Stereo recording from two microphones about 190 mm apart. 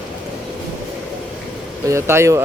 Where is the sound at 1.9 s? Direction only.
15° right (ahead or behind).